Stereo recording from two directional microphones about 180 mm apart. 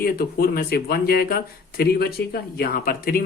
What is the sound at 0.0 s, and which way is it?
Speech, 55° left (ahead or behind).